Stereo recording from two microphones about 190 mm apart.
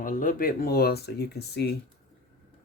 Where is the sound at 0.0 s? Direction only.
45° left (ahead or behind).